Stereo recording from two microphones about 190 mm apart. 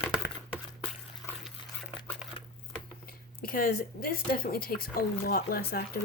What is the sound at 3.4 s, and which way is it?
Speech, 50° left (ahead or behind).